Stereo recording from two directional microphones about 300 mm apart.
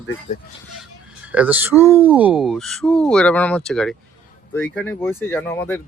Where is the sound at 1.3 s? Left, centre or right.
Centre.